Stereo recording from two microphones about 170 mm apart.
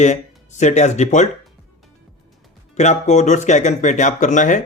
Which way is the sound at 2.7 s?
45° left (ahead or behind).